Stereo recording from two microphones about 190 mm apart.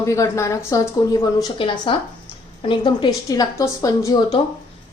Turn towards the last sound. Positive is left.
turn(degrees=20)  # may be behind; listen again after turning